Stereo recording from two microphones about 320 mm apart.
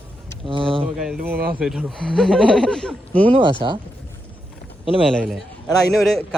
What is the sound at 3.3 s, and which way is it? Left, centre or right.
Speech, centre.